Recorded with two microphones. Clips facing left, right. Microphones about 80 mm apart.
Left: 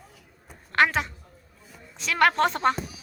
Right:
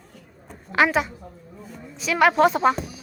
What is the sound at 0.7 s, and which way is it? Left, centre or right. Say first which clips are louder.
A woman's voice: right 3 dB; centre.